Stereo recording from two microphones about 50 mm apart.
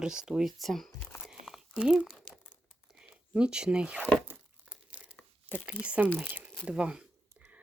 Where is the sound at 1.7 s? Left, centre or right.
Centre.